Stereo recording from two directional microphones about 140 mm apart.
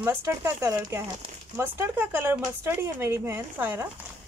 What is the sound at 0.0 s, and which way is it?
Speech, 15° right (ahead or behind).